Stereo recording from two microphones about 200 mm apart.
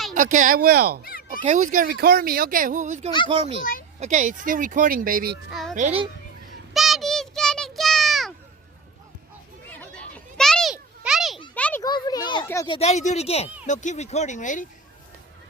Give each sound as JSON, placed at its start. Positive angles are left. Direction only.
{"t": 0.1, "sound": "speech", "side_deg": -40}
{"t": 1.4, "sound": "speech", "side_deg": -40}
{"t": 3.6, "sound": "a child's voice", "side_deg": 45}
{"t": 4.0, "sound": "speech", "side_deg": -40}
{"t": 5.5, "sound": "a child's voice", "side_deg": 0}
{"t": 5.7, "sound": "speech", "side_deg": -35}
{"t": 6.7, "sound": "a sound", "side_deg": 0}
{"t": 9.6, "sound": "children playing", "side_deg": 5}
{"t": 11.5, "sound": "a sound", "side_deg": 5}
{"t": 11.8, "sound": "children playing", "side_deg": 20}
{"t": 12.6, "sound": "speech", "side_deg": 30}